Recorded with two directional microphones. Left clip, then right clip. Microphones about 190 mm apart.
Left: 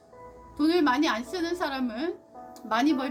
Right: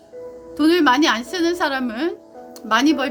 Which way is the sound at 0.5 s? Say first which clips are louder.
Right 8 dB; 50° right (ahead or behind).